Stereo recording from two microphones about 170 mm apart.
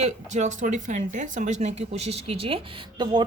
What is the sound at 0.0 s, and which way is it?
Speech, 45° right (ahead or behind).